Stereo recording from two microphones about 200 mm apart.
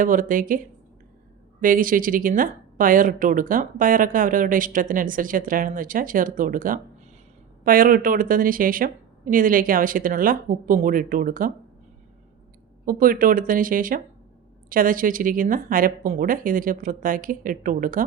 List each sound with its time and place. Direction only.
0.0 s speech: 45° right (ahead or behind)
1.6 s speech: 45° right (ahead or behind)
12.8 s speech: 45° right (ahead or behind)